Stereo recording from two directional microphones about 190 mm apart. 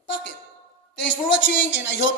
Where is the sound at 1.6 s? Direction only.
70° left (ahead or behind).